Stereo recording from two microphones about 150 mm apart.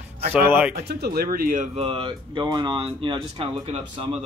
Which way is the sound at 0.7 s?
90° right.